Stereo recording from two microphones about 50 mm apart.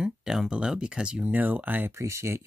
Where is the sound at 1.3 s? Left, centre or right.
Right.